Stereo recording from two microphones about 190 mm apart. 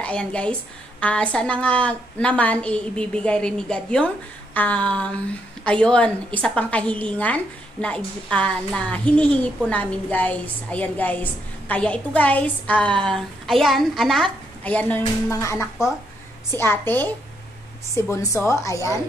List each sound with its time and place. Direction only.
0.0 s a woman's voice: 5° left (ahead or behind)